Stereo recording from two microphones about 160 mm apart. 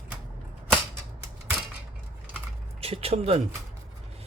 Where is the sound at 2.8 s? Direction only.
40° right (ahead or behind).